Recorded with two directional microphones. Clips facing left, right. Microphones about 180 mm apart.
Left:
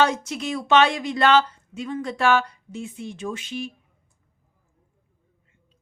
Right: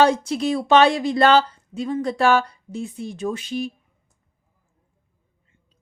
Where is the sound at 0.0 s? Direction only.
30° right (ahead or behind).